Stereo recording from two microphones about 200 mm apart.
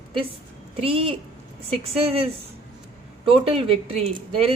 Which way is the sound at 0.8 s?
30° right (ahead or behind).